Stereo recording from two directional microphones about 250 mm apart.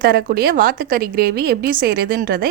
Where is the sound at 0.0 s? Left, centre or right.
Right.